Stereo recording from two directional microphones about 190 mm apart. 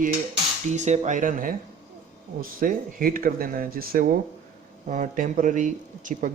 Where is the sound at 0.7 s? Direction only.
40° right (ahead or behind).